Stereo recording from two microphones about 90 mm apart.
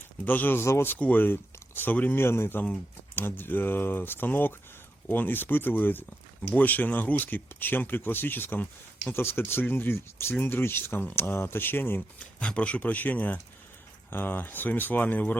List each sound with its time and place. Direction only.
0.3 s speech: 20° left (ahead or behind)
0.9 s speech: 15° left (ahead or behind)
12.4 s speech: 15° left (ahead or behind)